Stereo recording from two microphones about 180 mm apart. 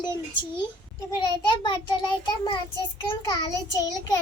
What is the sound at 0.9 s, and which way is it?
A child's voice, 25° left (ahead or behind).